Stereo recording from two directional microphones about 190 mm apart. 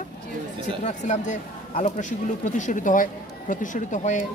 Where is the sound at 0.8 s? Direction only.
40° left (ahead or behind).